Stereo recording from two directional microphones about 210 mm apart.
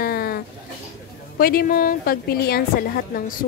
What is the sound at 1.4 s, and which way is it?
A woman's voice, 45° left (ahead or behind).